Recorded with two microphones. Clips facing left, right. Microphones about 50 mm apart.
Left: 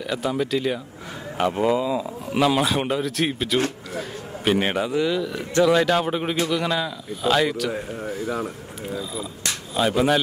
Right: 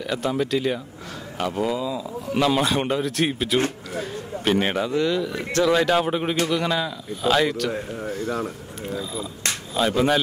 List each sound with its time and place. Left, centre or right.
0.1 s speech: centre
1.4 s speech: left
2.3 s speech: centre